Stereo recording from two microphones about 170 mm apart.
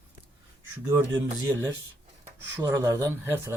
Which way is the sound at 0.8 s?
15° right (ahead or behind).